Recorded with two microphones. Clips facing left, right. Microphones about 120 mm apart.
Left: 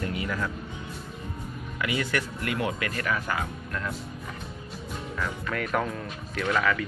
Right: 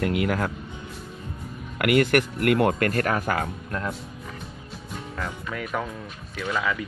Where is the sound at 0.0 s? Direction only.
65° right (ahead or behind).